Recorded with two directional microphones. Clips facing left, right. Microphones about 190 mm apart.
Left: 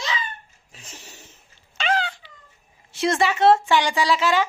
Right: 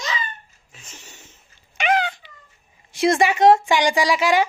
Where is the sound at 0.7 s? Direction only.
35° left (ahead or behind).